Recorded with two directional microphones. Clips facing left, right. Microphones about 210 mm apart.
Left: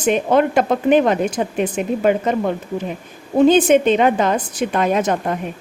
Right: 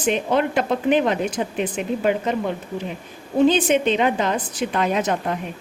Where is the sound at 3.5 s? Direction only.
45° left (ahead or behind).